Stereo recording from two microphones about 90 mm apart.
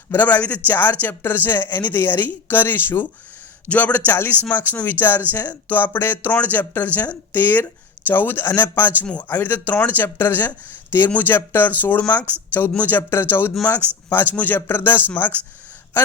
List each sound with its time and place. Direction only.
0.1 s speech: 20° left (ahead or behind)